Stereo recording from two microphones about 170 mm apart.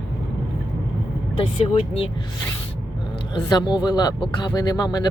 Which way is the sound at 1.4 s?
35° left (ahead or behind).